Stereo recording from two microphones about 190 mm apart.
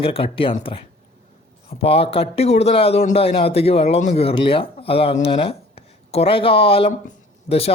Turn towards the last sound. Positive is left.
turn(degrees=30)  # may be behind; listen again after turning